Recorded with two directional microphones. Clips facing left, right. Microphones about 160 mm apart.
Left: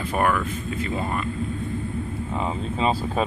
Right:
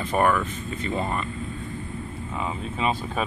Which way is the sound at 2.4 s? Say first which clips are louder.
Left 3 dB; 30° left (ahead or behind).